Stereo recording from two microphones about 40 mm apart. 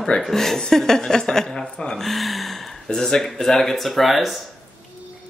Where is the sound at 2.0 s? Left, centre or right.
Centre.